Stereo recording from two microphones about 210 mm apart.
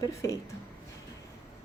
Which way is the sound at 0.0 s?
15° left (ahead or behind).